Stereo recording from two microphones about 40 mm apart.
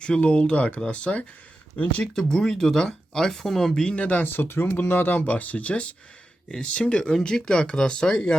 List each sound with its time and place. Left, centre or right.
0.0 s speech: left
2.1 s speech: centre
3.8 s speech: left
4.2 s speech: left
5.1 s speech: left
7.1 s speech: centre